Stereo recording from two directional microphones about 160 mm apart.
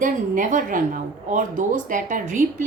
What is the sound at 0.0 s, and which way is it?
A woman's voice, 55° right (ahead or behind).